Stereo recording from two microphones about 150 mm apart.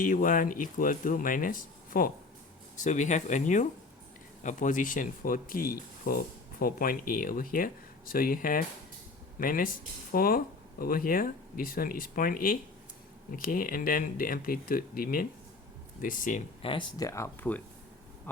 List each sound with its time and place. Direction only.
0.0 s speech: 65° left (ahead or behind)
2.7 s speech: 55° left (ahead or behind)
16.6 s speech: 30° left (ahead or behind)